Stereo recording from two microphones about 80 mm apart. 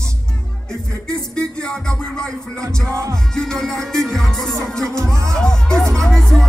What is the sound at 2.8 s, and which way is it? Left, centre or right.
Music, right.